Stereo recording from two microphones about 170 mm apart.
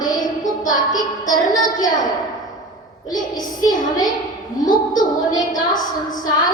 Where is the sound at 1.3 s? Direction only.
20° left (ahead or behind).